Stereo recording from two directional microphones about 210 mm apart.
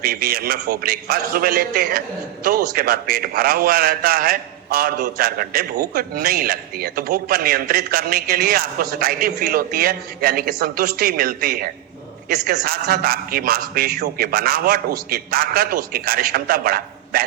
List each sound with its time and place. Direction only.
0.0 s a man's voice: 45° right (ahead or behind)